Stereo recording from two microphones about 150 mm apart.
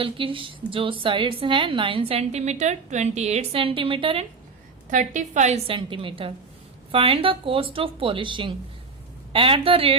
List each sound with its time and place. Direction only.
0.0 s a woman's voice: 35° right (ahead or behind)
4.9 s a woman's voice: 55° right (ahead or behind)
5.7 s a woman's voice: 35° right (ahead or behind)